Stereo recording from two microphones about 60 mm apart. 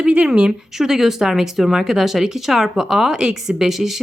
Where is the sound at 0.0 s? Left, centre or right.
Centre.